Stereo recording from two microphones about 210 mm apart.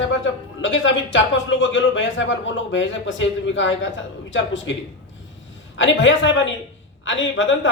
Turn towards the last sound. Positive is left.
turn(degrees=65)  # may be behind; listen again after turning